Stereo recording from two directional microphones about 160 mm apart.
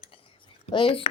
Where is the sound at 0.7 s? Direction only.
35° left (ahead or behind).